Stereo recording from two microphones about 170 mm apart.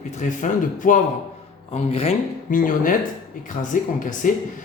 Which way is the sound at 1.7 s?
35° left (ahead or behind).